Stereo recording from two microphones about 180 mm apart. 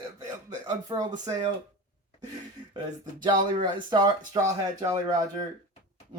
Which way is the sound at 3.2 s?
25° right (ahead or behind).